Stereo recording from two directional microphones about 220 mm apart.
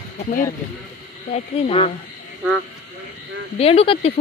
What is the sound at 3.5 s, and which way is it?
Speech, 25° left (ahead or behind).